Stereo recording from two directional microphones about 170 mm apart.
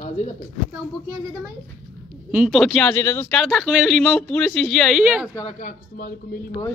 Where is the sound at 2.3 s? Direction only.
Centre (ahead or behind); by 3.3 s 15° left (ahead or behind).